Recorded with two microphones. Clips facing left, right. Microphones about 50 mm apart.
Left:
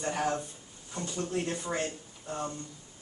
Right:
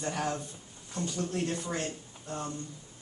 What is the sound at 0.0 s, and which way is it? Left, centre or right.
Speech, centre.